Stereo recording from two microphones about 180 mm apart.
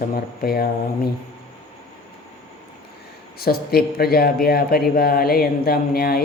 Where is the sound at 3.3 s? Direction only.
60° left (ahead or behind).